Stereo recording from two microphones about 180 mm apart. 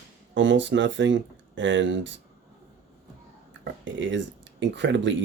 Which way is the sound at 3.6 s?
90° right.